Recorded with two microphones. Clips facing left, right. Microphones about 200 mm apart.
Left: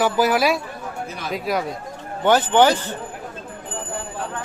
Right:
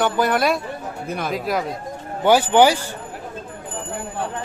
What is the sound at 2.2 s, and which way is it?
Speech, 10° right (ahead or behind).